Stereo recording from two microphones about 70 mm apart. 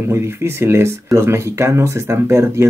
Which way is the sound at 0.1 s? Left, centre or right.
Right.